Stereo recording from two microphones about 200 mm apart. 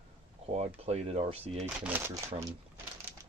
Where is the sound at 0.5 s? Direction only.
30° right (ahead or behind).